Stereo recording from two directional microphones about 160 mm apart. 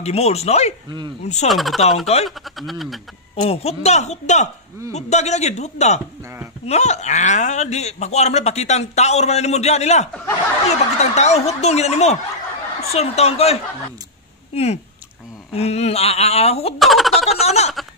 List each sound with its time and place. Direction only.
0.0 s speech: 40° left (ahead or behind)
1.5 s speech: centre (ahead or behind)
3.3 s speech: 40° left (ahead or behind)
16.7 s speech: centre (ahead or behind)
17.3 s a sound: 40° left (ahead or behind)